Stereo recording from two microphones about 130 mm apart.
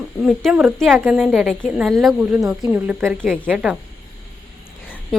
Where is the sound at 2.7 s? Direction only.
15° right (ahead or behind).